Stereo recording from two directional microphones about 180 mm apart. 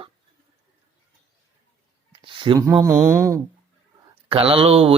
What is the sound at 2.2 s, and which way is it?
Speech, 25° right (ahead or behind).